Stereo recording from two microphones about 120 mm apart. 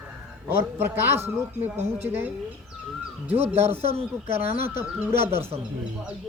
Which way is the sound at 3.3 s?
55° right (ahead or behind).